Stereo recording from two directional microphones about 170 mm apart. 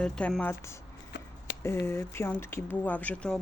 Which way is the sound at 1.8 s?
15° left (ahead or behind).